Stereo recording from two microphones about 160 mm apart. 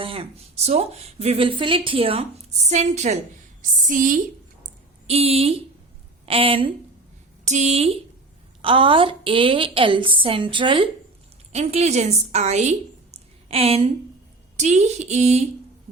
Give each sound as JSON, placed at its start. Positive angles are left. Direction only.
{"t": 0.0, "sound": "a woman's voice", "side_deg": -35}
{"t": 2.6, "sound": "a woman's voice", "side_deg": -45}
{"t": 5.0, "sound": "a woman's voice", "side_deg": -40}
{"t": 7.4, "sound": "a woman's voice", "side_deg": -45}
{"t": 11.5, "sound": "a woman's voice", "side_deg": -40}